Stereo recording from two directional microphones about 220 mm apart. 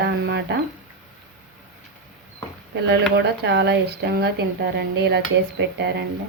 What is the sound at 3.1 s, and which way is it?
Speech, 50° right (ahead or behind).